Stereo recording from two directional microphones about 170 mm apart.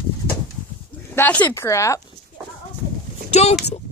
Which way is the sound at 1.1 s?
10° left (ahead or behind).